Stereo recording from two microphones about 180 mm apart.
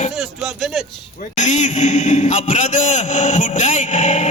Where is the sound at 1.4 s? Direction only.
40° left (ahead or behind).